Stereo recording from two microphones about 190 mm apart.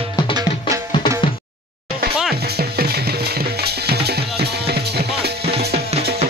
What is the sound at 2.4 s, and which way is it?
Music, 55° right (ahead or behind).